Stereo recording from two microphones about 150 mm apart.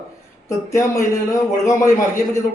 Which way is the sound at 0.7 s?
20° left (ahead or behind).